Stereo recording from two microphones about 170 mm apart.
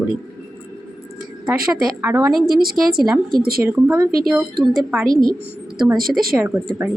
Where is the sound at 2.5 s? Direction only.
60° right (ahead or behind).